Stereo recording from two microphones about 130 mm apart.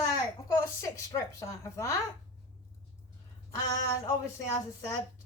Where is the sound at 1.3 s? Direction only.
25° left (ahead or behind).